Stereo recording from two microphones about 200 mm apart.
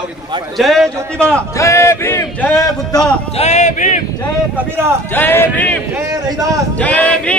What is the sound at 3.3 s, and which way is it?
Speech, 35° left (ahead or behind).